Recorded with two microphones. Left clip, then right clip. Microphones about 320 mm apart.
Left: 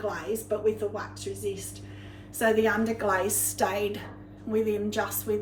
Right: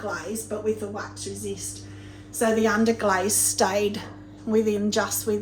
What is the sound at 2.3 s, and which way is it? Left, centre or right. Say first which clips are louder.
A woman's voice: right 2 dB; centre.